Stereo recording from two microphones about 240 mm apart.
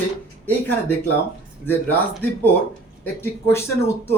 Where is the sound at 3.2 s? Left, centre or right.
Centre.